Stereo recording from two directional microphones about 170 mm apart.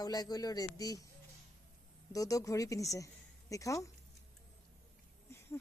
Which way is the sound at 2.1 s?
20° left (ahead or behind).